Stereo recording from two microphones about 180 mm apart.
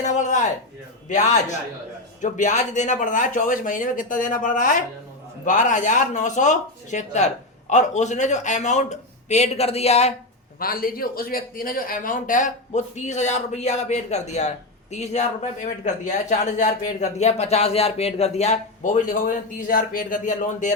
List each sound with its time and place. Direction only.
0.0 s a sound: 40° left (ahead or behind)
1.0 s a man's voice: 40° left (ahead or behind)
10.6 s speech: 55° left (ahead or behind)